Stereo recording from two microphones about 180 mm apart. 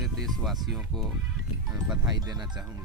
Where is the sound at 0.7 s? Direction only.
Centre (ahead or behind).